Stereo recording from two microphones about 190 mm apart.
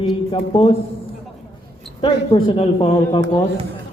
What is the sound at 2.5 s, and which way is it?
Speech, 25° left (ahead or behind).